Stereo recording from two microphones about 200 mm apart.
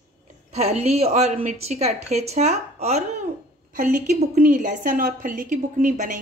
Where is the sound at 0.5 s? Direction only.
35° right (ahead or behind).